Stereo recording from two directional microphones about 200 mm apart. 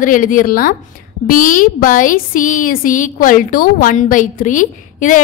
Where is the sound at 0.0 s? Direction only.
40° left (ahead or behind).